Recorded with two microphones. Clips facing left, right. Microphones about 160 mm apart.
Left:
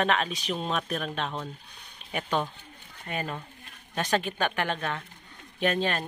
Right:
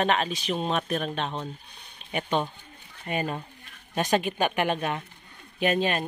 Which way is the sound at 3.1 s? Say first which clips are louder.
Right 4 dB; 20° right (ahead or behind).